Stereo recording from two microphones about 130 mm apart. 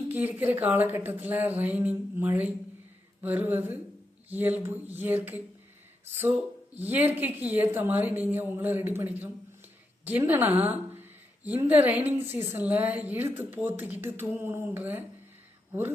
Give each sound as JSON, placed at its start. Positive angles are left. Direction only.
{"t": 0.1, "sound": "a woman's voice", "side_deg": -15}